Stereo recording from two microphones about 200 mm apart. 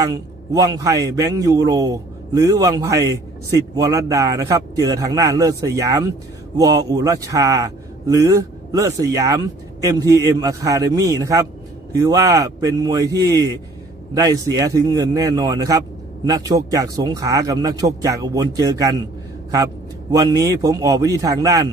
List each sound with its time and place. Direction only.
0.0 s a man's voice: 15° right (ahead or behind)
20.1 s a man's voice: 20° right (ahead or behind)